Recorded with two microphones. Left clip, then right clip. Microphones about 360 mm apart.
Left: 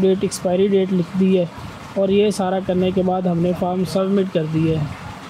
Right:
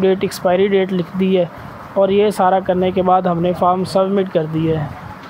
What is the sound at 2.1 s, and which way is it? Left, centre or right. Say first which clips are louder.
Speech: right 4 dB; centre.